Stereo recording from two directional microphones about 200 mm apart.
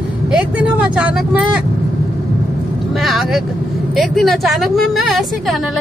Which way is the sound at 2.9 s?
Centre (ahead or behind).